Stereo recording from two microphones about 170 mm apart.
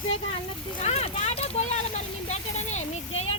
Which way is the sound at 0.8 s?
40° left (ahead or behind).